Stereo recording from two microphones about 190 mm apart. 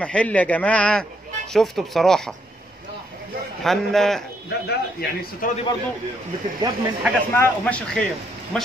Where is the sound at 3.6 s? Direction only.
Centre (ahead or behind).